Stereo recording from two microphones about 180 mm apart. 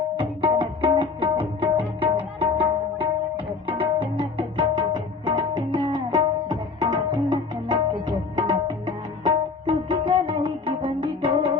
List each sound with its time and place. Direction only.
0.2 s music: 25° right (ahead or behind)
3.3 s tabla: 30° right (ahead or behind)
4.2 s music: 30° right (ahead or behind)